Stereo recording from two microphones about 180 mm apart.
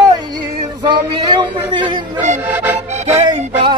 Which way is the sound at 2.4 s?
10° right (ahead or behind).